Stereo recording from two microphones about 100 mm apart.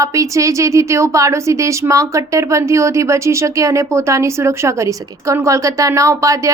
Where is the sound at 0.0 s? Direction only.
35° right (ahead or behind).